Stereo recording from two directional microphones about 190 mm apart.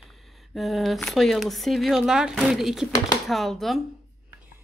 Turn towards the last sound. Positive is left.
turn(degrees=0)  # may be behind; listen again after turning